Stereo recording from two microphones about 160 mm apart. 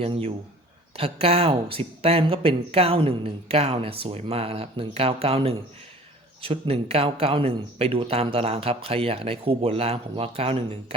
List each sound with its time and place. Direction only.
0.0 s speech: 40° right (ahead or behind)